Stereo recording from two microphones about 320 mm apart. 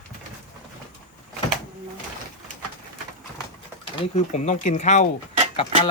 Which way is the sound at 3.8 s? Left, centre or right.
Centre.